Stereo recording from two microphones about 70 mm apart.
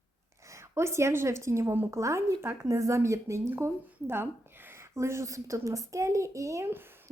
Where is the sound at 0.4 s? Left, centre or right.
Right.